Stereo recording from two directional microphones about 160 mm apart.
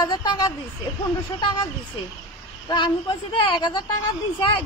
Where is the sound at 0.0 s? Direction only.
25° left (ahead or behind).